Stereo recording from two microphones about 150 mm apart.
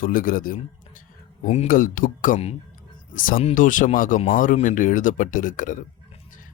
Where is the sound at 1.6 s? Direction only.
70° left (ahead or behind).